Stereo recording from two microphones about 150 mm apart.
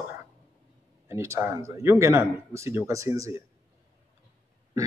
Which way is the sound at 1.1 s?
20° right (ahead or behind).